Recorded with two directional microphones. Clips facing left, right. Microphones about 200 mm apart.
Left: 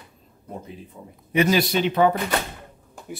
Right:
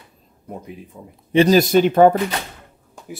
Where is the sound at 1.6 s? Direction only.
45° right (ahead or behind).